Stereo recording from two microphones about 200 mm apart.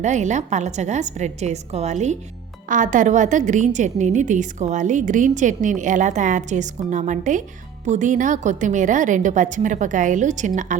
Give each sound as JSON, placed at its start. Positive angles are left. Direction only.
{"t": 0.0, "sound": "a woman's voice", "side_deg": -35}